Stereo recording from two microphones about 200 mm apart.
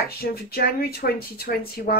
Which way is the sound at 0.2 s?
50° left (ahead or behind).